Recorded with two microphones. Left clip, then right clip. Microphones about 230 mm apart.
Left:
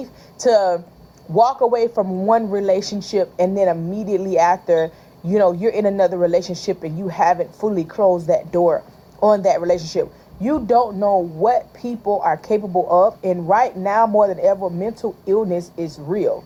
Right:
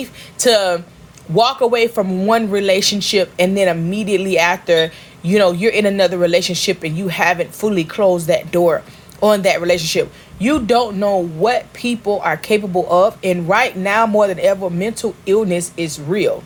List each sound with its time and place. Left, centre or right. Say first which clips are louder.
0.0 s speech: right 3 dB; right